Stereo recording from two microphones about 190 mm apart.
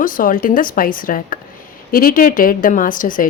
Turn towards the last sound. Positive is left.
turn(degrees=45)  # may be behind; listen again after turning